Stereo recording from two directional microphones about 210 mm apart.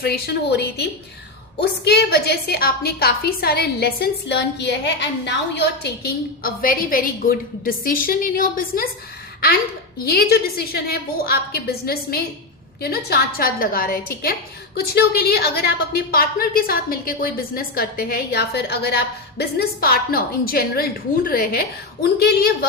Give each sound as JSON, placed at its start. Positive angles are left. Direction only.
{"t": 0.0, "sound": "a woman's voice", "side_deg": 50}
{"t": 10.0, "sound": "a woman's voice", "side_deg": 45}